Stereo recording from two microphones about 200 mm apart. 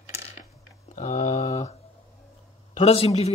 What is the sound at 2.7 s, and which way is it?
Speech, 30° left (ahead or behind).